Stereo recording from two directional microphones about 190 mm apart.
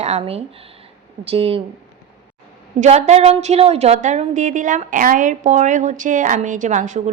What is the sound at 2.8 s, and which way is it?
A woman's voice, 40° right (ahead or behind).